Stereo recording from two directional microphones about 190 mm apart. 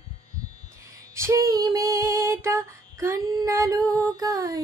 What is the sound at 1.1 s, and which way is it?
Female singing, 15° right (ahead or behind).